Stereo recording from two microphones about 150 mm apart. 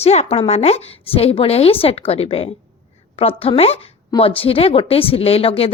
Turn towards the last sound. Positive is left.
turn(degrees=40)  # may be behind; listen again after turning